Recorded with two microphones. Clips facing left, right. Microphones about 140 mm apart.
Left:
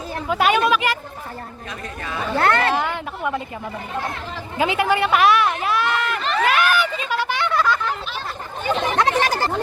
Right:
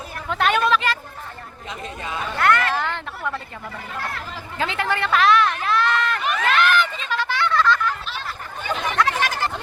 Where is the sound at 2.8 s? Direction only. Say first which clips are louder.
Left 3 dB; 15° left (ahead or behind).